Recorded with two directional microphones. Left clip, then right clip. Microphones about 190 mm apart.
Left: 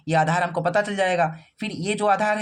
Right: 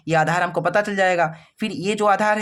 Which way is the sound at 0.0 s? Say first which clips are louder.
Right 2 dB; 35° right (ahead or behind).